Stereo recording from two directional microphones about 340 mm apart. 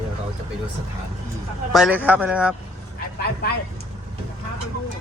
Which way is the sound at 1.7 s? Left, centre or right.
Centre.